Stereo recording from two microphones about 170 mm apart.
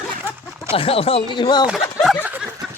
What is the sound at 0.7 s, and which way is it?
Speech, 35° left (ahead or behind).